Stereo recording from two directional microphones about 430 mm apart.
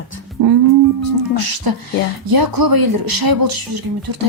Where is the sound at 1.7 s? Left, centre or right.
Right.